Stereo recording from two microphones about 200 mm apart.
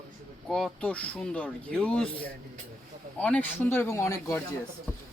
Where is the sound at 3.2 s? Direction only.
5° left (ahead or behind).